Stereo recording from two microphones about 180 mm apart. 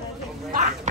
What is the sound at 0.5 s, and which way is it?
Speech, 45° right (ahead or behind).